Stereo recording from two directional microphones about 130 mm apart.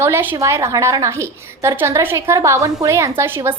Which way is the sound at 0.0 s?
15° right (ahead or behind).